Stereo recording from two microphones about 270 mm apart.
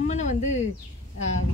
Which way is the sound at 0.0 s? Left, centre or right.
Left.